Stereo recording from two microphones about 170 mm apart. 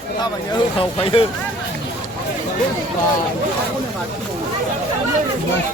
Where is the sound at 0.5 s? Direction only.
30° left (ahead or behind).